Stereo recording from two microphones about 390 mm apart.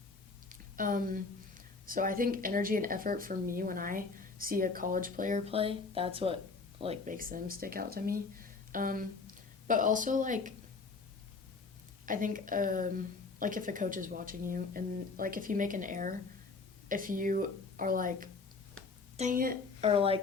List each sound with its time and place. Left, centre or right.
0.4 s a sound: right
1.5 s speech: right
12.0 s a woman's voice: centre